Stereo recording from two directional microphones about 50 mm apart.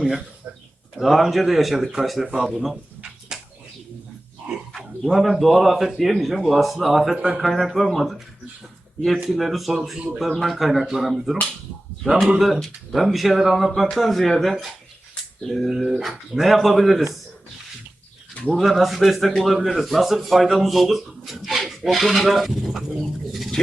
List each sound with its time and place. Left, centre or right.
0.9 s speech: centre
3.3 s a sound: centre
4.4 s speech: right
5.0 s speech: centre
9.3 s speech: centre
15.1 s a sound: centre
15.9 s speech: centre
18.5 s speech: centre